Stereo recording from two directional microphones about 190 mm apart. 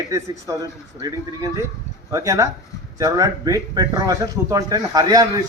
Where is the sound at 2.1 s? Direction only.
15° right (ahead or behind).